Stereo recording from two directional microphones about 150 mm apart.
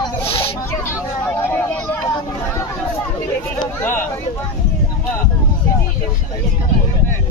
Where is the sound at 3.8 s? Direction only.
15° left (ahead or behind).